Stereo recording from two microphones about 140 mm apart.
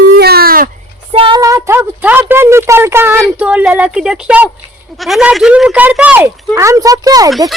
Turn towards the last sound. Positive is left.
turn(degrees=-25)  # may be behind; listen again after turning